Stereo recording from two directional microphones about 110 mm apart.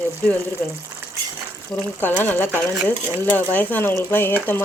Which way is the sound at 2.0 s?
20° left (ahead or behind).